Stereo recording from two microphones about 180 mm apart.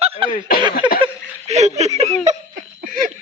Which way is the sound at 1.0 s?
35° right (ahead or behind).